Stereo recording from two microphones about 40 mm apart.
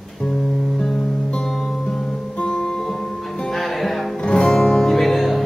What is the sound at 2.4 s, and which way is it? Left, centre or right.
Music, centre.